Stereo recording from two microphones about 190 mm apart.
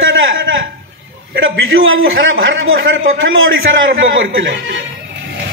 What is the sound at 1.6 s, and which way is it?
A man's voice, 90° right.